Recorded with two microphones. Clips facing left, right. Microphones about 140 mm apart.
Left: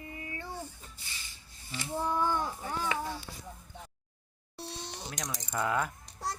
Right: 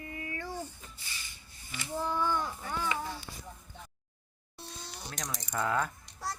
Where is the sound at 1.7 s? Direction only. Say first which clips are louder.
Left 2 dB; 30° left (ahead or behind).